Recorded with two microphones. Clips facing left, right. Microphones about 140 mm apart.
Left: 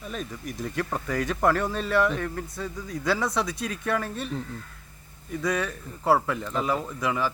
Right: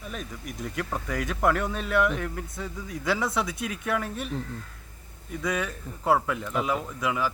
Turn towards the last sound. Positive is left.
turn(degrees=-5)  # may be behind; listen again after turning